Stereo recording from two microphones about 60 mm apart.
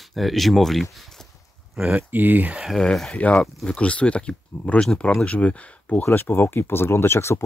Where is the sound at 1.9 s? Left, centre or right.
Right.